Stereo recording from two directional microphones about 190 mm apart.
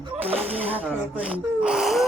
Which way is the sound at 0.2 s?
30° right (ahead or behind).